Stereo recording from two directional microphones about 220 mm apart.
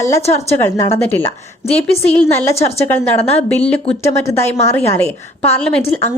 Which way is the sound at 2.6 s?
30° left (ahead or behind).